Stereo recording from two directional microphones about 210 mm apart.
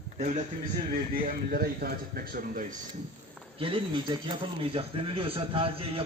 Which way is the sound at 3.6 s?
25° right (ahead or behind).